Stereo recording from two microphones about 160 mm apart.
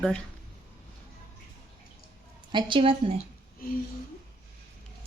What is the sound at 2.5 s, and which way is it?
Speech, 30° right (ahead or behind).